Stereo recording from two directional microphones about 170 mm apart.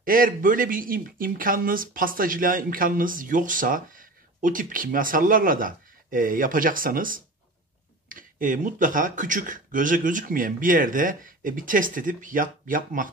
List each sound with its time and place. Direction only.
0.0 s speech: 55° right (ahead or behind)